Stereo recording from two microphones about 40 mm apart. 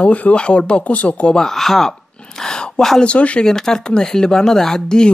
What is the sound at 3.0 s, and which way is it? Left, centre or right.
Speech, left.